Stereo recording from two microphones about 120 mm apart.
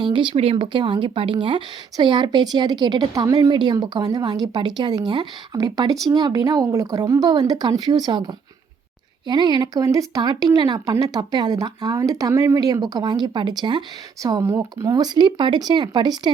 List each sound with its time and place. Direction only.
0.0 s speech: 40° right (ahead or behind)
3.5 s speech: 40° right (ahead or behind)
9.2 s speech: 35° right (ahead or behind)
14.4 s speech: 20° right (ahead or behind)
14.9 s speech: 35° right (ahead or behind)